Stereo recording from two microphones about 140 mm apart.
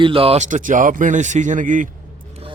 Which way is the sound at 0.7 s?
65° right (ahead or behind).